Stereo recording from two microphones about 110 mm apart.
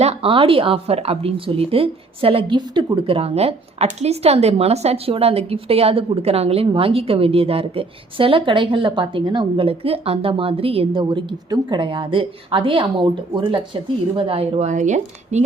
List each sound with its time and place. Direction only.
0.0 s a woman's voice: 75° right (ahead or behind)
0.3 s a woman's voice: 55° right (ahead or behind)
14.2 s a woman's voice: 60° right (ahead or behind); by 15.4 s 90° right